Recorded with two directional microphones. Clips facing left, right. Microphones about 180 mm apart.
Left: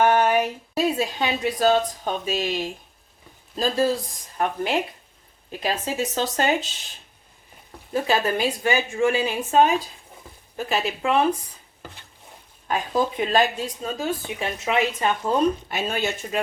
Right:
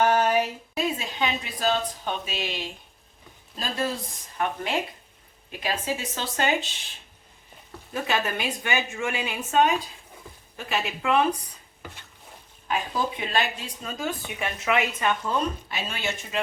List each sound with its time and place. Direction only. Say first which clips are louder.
0.0 s a sound: left 3 dB; 55° left (ahead or behind)
0.7 s speech: left 6 dB; 35° left (ahead or behind)
5.5 s speech: left 2 dB; 40° left (ahead or behind)
7.9 s speech: left 5 dB; 35° left (ahead or behind)
12.6 s speech: left 4 dB; 45° left (ahead or behind)
15.7 s speech: left 6 dB; 45° left (ahead or behind)